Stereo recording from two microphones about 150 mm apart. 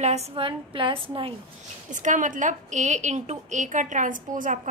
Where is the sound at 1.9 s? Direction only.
55° right (ahead or behind).